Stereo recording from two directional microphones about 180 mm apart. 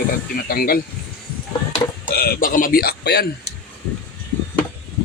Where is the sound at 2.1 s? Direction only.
55° left (ahead or behind).